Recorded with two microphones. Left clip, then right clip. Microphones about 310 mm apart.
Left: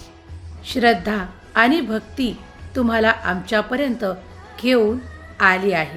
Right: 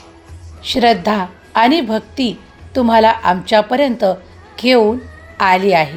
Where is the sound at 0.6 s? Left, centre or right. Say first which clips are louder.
Right 5 dB; centre.